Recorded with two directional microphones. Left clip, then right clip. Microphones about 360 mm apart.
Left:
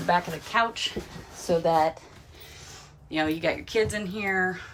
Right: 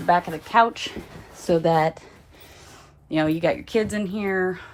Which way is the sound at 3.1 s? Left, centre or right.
Centre.